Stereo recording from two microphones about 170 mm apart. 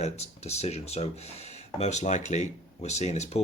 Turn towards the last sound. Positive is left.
turn(degrees=40)  # may be behind; listen again after turning